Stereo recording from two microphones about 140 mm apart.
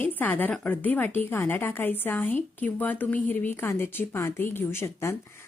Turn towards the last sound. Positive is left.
turn(degrees=20)  # may be behind; listen again after turning